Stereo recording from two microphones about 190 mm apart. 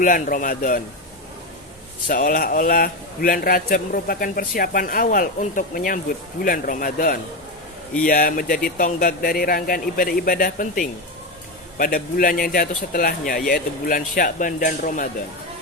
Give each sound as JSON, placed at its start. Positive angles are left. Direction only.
{"t": 0.0, "sound": "a man's voice", "side_deg": 45}
{"t": 2.0, "sound": "a man's voice", "side_deg": 45}